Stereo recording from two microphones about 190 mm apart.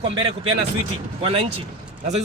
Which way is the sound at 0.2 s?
30° right (ahead or behind).